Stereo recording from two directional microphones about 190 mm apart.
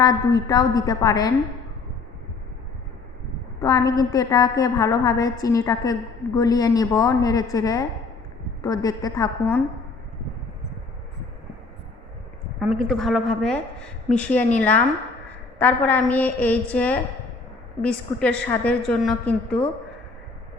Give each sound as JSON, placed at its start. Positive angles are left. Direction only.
{"t": 0.0, "sound": "a woman's voice", "side_deg": 20}
{"t": 3.6, "sound": "a woman's voice", "side_deg": 20}
{"t": 12.5, "sound": "a woman's voice", "side_deg": 0}